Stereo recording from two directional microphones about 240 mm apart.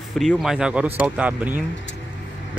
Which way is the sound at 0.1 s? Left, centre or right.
Centre.